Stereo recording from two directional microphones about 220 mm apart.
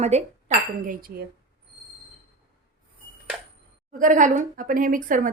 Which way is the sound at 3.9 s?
35° right (ahead or behind).